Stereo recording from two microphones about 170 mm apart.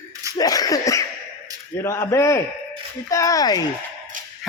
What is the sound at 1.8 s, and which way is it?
A man's voice, 15° left (ahead or behind).